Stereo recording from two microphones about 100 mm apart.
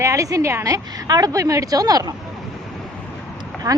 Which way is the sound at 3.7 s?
30° right (ahead or behind).